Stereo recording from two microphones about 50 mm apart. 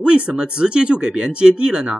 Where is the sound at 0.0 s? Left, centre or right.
Right.